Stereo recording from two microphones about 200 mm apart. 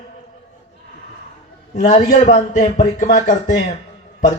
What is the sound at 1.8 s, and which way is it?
Speech, 30° left (ahead or behind).